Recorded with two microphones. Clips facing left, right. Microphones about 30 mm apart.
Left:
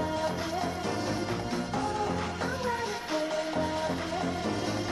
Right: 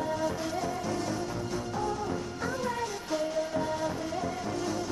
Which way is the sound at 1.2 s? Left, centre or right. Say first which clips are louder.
Left 2 dB; left.